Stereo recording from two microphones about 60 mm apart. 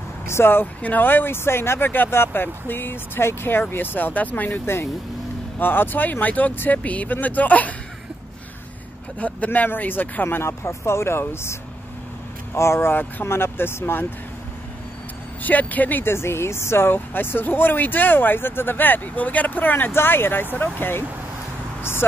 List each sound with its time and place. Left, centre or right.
0.3 s speech: left
5.6 s speech: left
9.2 s speech: left
12.5 s speech: left
15.4 s speech: left
16.0 s speech: left
19.9 s speech: left